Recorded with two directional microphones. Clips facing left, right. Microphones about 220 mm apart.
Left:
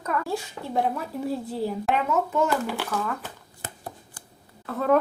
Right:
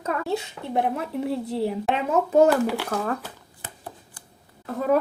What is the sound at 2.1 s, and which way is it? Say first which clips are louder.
Speech: right 9 dB; 35° right (ahead or behind).